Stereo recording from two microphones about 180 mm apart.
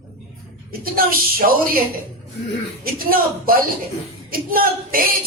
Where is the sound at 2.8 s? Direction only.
55° right (ahead or behind).